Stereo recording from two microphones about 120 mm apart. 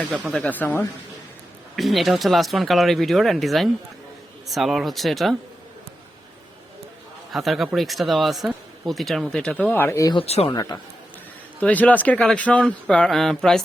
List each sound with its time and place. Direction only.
0.4 s speech: 15° left (ahead or behind)
1.7 s speech: centre (ahead or behind)
7.3 s speech: centre (ahead or behind)
9.6 s speech: 15° left (ahead or behind)
10.2 s speech: 55° left (ahead or behind)
10.5 s a man's voice: 30° left (ahead or behind)
11.6 s speech: 15° left (ahead or behind)